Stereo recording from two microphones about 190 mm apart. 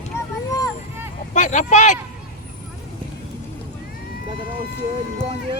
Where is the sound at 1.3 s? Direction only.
40° left (ahead or behind).